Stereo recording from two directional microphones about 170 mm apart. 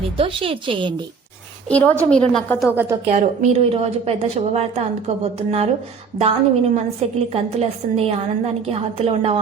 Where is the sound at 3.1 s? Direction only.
45° right (ahead or behind).